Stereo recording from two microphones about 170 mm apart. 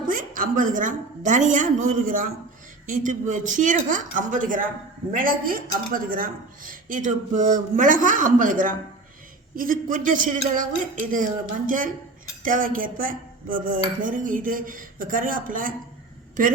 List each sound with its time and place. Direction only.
0.1 s cutlery: 55° right (ahead or behind)
5.1 s a woman's voice: 55° right (ahead or behind)
5.9 s cutlery: 55° right (ahead or behind)